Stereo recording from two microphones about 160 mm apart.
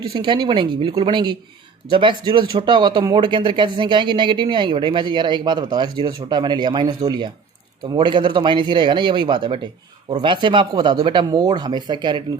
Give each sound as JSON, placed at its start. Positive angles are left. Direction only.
{"t": 0.1, "sound": "speech", "side_deg": -30}